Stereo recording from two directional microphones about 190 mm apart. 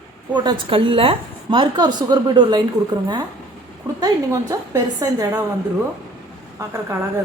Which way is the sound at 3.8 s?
15° right (ahead or behind).